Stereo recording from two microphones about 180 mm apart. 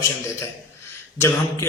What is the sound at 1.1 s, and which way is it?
Speech, 15° left (ahead or behind).